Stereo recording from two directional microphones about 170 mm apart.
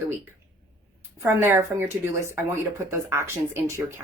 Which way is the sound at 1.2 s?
15° right (ahead or behind).